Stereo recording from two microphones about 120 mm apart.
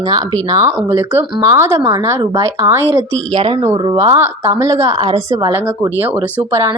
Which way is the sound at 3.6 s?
25° right (ahead or behind).